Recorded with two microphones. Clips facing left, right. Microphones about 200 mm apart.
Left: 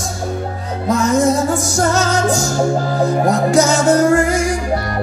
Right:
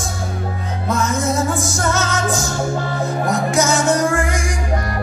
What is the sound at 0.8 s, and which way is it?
Music, 40° left (ahead or behind).